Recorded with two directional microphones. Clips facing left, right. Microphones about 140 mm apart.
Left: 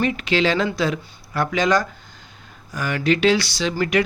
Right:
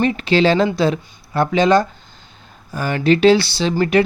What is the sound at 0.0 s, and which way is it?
Speech, 35° right (ahead or behind).